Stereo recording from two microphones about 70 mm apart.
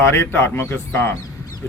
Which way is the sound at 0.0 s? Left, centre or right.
Left.